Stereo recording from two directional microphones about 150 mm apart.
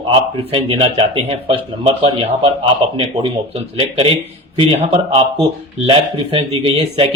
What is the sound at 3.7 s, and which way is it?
Speech, 40° right (ahead or behind).